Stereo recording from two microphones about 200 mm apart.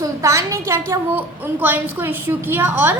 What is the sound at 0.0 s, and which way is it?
A woman's voice, 15° right (ahead or behind).